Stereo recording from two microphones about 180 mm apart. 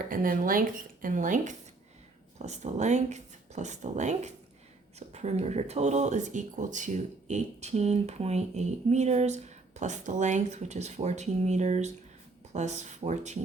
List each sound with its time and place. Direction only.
0.1 s speech: 50° right (ahead or behind)